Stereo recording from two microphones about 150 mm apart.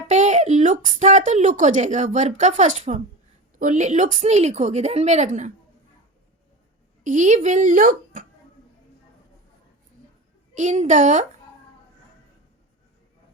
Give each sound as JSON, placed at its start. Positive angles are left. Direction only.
{"t": 0.1, "sound": "speech", "side_deg": -50}
{"t": 7.0, "sound": "a child's voice", "side_deg": -55}
{"t": 10.5, "sound": "speech", "side_deg": -50}